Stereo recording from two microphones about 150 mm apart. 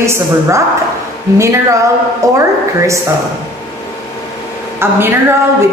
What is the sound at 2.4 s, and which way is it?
Speech, 20° right (ahead or behind).